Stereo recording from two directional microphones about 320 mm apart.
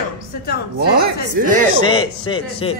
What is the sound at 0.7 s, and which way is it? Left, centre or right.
Speech, right.